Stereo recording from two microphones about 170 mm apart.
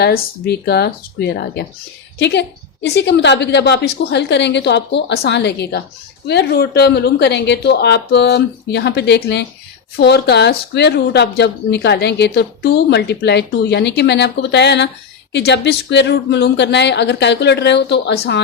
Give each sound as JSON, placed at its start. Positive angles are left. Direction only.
{"t": 0.0, "sound": "speech", "side_deg": 65}
{"t": 2.1, "sound": "a woman's voice", "side_deg": 90}
{"t": 6.2, "sound": "a woman's voice", "side_deg": 75}